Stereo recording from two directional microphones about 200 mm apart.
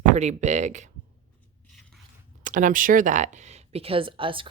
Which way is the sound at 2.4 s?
40° right (ahead or behind).